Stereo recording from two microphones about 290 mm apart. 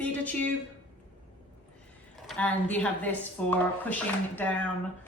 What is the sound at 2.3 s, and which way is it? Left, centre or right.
A woman's voice, centre.